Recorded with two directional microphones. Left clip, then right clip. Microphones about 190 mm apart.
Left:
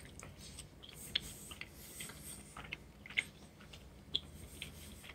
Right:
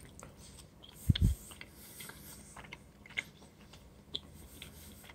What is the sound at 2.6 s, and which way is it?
Mechanisms, 30° right (ahead or behind).